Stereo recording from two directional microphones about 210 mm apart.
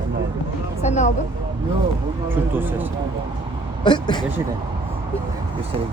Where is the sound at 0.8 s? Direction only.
35° left (ahead or behind).